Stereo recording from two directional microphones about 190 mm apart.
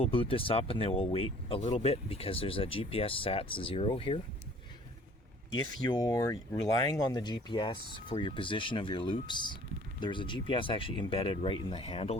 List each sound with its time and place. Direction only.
0.0 s speech: 30° left (ahead or behind)
5.5 s speech: 20° left (ahead or behind)